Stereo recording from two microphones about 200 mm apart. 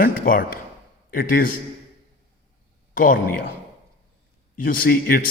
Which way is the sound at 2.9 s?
45° left (ahead or behind).